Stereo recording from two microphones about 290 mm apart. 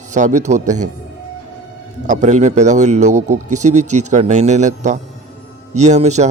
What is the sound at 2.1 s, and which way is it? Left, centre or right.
A man's voice, right.